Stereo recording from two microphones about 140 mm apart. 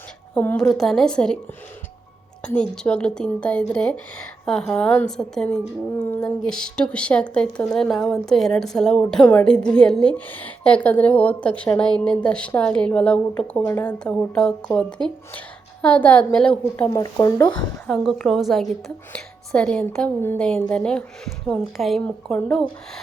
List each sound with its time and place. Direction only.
0.3 s a woman's voice: 10° left (ahead or behind)
2.4 s a woman's voice: 5° left (ahead or behind)
16.9 s speech: 25° left (ahead or behind)
17.8 s a woman's voice: 5° left (ahead or behind)